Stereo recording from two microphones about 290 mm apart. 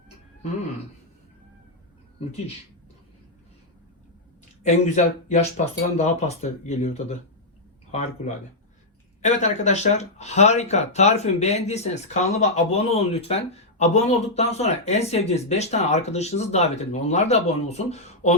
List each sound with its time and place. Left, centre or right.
4.6 s speech: left